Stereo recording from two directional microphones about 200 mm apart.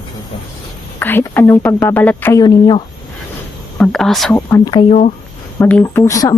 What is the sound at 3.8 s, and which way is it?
Speech, centre (ahead or behind).